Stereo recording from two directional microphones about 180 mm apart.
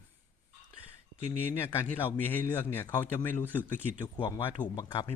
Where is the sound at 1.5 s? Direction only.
10° left (ahead or behind).